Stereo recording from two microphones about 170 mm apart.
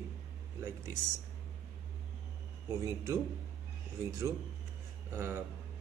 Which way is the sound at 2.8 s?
20° right (ahead or behind).